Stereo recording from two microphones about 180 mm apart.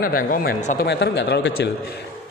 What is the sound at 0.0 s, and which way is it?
Speech, 50° left (ahead or behind).